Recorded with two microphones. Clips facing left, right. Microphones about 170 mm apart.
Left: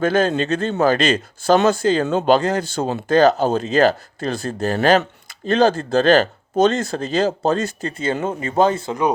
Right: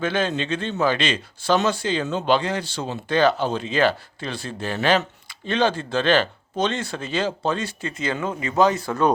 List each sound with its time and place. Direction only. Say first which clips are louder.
0.0 s a man's voice: left 6 dB; 45° left (ahead or behind)